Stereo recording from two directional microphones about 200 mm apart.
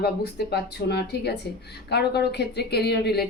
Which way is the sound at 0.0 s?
55° left (ahead or behind).